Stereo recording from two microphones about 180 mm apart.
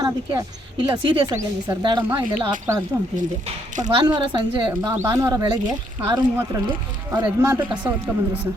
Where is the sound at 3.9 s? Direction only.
25° right (ahead or behind).